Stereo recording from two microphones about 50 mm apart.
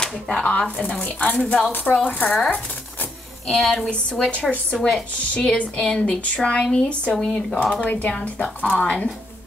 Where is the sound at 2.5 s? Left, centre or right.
Left.